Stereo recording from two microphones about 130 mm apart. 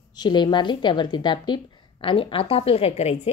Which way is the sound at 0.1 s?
35° left (ahead or behind).